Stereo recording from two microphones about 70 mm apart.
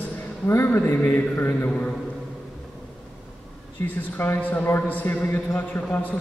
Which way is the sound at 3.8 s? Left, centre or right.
Left.